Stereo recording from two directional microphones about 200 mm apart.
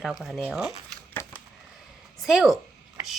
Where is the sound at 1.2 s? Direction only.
15° left (ahead or behind).